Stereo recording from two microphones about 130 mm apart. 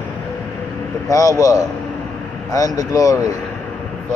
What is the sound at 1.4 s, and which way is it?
A man's voice, 25° left (ahead or behind).